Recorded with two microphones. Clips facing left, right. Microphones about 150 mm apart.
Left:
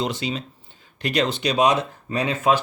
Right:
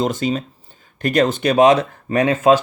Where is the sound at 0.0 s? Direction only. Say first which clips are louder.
Right 6 dB; 45° right (ahead or behind).